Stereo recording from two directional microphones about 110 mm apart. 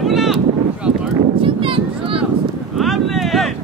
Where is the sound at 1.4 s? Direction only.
55° right (ahead or behind).